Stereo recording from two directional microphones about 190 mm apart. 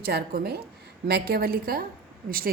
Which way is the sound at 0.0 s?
55° right (ahead or behind).